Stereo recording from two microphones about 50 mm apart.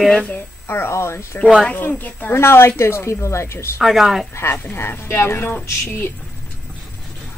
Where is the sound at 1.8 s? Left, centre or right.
Left.